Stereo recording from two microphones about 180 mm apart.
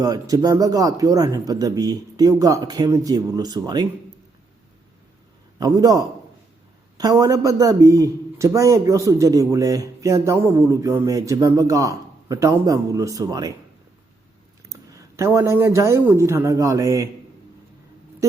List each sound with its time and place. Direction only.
0.0 s a man's voice: 20° right (ahead or behind)
5.5 s a man's voice: 20° right (ahead or behind)
14.7 s speech: 15° right (ahead or behind)